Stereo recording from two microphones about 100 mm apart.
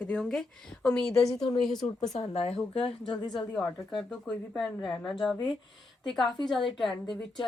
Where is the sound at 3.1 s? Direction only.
5° left (ahead or behind).